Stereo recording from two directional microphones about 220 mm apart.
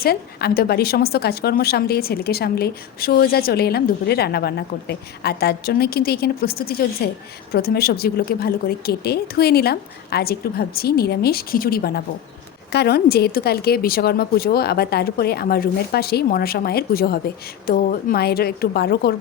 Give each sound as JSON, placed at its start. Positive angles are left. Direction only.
{"t": 0.0, "sound": "a woman's voice", "side_deg": 45}